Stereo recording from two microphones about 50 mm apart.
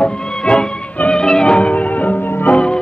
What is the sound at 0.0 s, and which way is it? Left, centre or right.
Music, centre.